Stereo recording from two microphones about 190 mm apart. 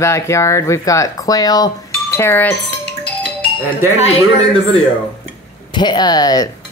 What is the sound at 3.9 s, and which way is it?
Speech, 35° left (ahead or behind).